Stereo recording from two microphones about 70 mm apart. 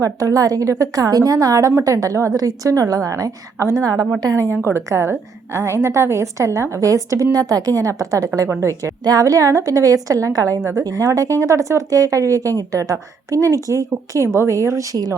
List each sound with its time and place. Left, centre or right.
0.0 s a woman's voice: right
9.0 s speech: right